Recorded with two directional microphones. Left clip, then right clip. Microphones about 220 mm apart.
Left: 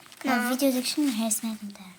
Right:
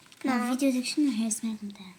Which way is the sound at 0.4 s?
20° right (ahead or behind).